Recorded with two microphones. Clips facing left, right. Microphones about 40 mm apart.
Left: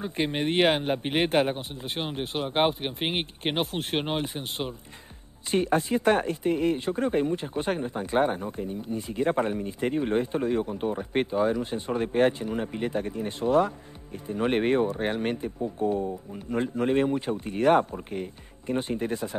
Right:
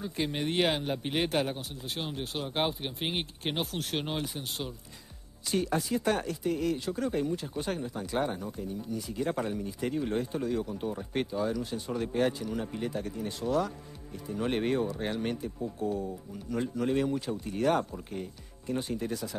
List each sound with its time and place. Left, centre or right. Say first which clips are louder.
0.0 s speech: left 5 dB; left